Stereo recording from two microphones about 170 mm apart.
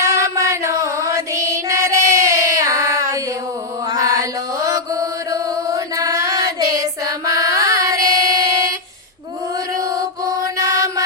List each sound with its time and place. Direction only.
0.0 s music: 15° right (ahead or behind)
3.9 s mantra: 20° right (ahead or behind)
9.7 s mantra: 20° right (ahead or behind)